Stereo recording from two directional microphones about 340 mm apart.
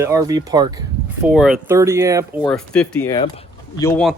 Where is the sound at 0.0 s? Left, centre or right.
Centre.